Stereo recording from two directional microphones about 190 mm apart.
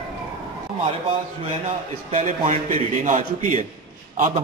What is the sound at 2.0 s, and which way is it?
A man's voice, 40° right (ahead or behind).